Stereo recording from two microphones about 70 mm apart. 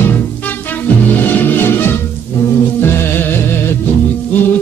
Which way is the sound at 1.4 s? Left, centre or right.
Left.